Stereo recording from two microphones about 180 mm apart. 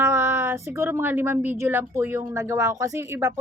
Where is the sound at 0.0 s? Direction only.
15° right (ahead or behind).